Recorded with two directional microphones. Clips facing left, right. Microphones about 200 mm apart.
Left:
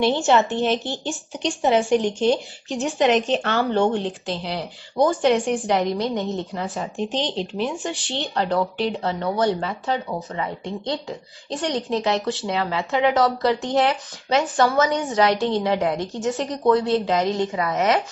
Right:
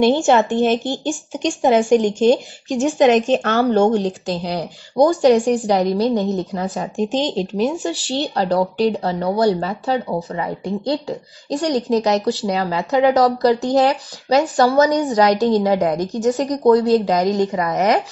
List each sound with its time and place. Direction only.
0.0 s speech: 45° right (ahead or behind)